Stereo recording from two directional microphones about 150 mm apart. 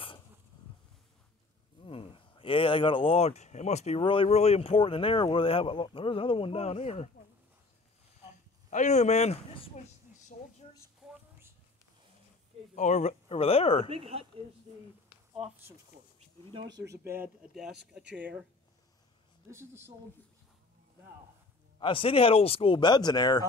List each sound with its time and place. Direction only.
1.8 s speech: 35° left (ahead or behind)
4.0 s speech: 35° left (ahead or behind)
8.2 s speech: 50° left (ahead or behind)
12.7 s speech: 55° left (ahead or behind)
13.8 s speech: 40° right (ahead or behind)
16.8 s speech: 20° right (ahead or behind)
19.5 s speech: 15° right (ahead or behind)
21.7 s speech: 35° left (ahead or behind)